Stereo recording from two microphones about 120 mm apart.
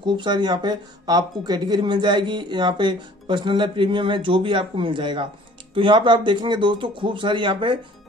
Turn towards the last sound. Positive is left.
turn(degrees=-40)  # may be behind; listen again after turning